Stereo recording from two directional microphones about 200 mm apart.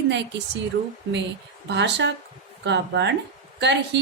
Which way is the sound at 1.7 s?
60° right (ahead or behind).